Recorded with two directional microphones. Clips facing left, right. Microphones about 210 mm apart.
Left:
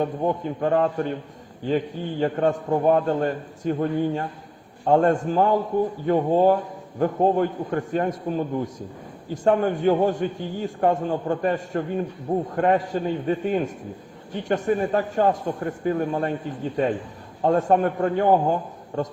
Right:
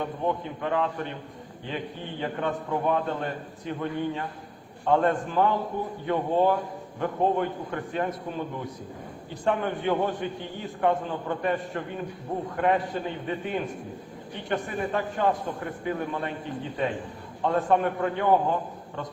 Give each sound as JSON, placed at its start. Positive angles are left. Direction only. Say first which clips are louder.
{"t": 0.0, "sound": "a man's voice", "louder": "left 5 dB", "side_deg": 45}
{"t": 17.4, "sound": "a man's voice", "louder": "left 4 dB", "side_deg": 45}